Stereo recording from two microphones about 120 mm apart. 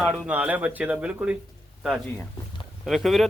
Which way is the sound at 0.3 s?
15° right (ahead or behind).